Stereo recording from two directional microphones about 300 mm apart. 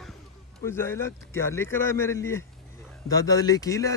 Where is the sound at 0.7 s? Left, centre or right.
Centre.